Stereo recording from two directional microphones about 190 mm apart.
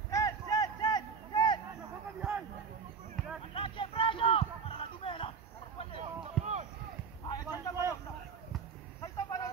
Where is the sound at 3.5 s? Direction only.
30° left (ahead or behind).